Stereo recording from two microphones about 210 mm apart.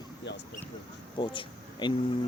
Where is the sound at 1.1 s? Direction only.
25° left (ahead or behind).